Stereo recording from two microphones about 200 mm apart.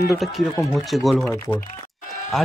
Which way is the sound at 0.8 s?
Centre (ahead or behind).